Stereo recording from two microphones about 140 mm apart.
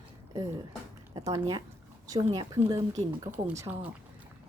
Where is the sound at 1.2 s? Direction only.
25° right (ahead or behind).